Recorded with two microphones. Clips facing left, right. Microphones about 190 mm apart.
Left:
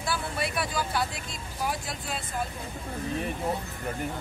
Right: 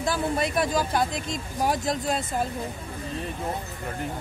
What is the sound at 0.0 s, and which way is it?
Speech, 45° right (ahead or behind).